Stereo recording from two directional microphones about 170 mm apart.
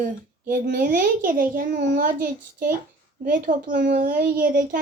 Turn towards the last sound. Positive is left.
turn(degrees=-55)  # may be behind; listen again after turning